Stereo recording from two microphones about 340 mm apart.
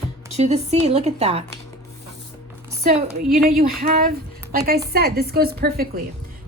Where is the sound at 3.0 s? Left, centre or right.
Centre.